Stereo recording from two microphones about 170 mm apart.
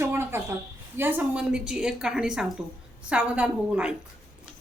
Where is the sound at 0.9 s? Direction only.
10° right (ahead or behind).